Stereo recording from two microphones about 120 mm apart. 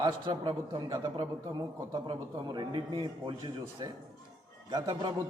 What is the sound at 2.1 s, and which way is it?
Speech, 40° right (ahead or behind).